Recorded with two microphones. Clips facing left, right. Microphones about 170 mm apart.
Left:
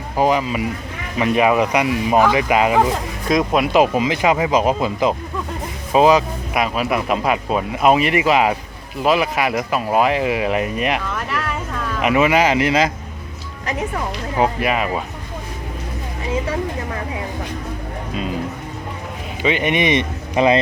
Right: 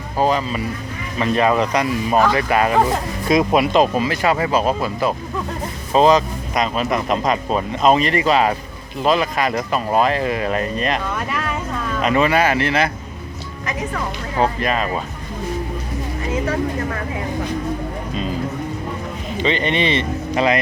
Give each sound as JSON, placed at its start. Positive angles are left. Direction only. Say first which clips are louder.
{"t": 0.2, "sound": "speech", "louder": "left 1 dB", "side_deg": 15}
{"t": 3.2, "sound": "speech", "louder": "right 1 dB", "side_deg": -5}
{"t": 3.7, "sound": "speech", "louder": "left 1 dB", "side_deg": 15}
{"t": 12.0, "sound": "speech", "louder": "left 1 dB", "side_deg": 10}
{"t": 13.9, "sound": "speech", "louder": "left 1 dB", "side_deg": 15}
{"t": 19.4, "sound": "speech", "louder": "left 1 dB", "side_deg": 10}